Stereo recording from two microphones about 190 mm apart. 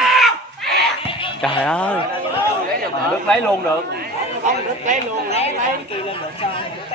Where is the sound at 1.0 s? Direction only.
25° left (ahead or behind).